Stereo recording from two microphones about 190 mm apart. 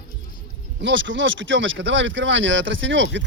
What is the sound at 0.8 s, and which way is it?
Speech, 80° right.